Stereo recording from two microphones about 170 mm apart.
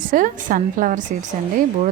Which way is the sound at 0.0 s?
50° right (ahead or behind).